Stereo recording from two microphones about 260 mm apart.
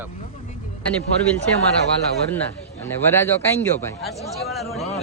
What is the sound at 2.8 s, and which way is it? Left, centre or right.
Speech, centre.